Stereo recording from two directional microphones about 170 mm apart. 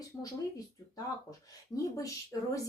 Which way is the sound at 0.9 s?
20° left (ahead or behind).